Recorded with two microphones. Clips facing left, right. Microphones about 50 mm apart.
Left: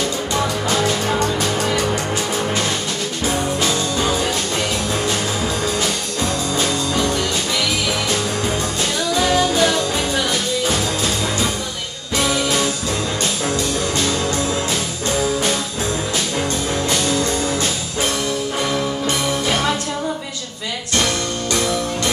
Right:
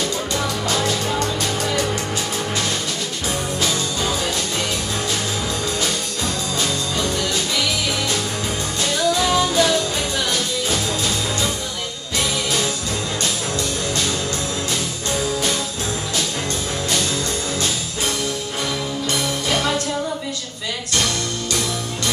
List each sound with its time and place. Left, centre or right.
9.1 s music: left